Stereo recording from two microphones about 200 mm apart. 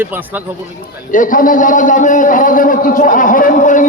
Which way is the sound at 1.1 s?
40° left (ahead or behind).